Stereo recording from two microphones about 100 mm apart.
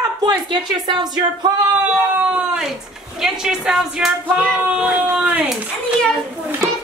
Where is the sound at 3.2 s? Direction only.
5° right (ahead or behind).